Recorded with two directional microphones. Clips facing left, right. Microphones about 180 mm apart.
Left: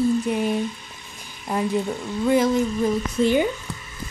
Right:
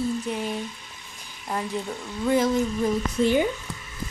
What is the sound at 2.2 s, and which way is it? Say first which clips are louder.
Speech: left 3 dB; 15° left (ahead or behind).